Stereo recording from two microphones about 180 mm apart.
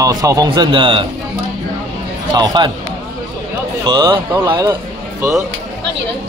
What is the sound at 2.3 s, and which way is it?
Speech, 25° right (ahead or behind).